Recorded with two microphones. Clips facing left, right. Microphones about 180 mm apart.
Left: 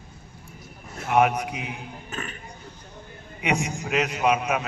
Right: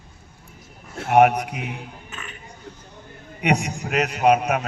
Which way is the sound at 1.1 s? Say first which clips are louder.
Right 5 dB; 50° right (ahead or behind).